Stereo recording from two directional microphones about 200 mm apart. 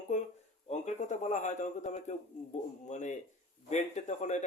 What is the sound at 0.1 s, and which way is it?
A man's voice, 40° left (ahead or behind).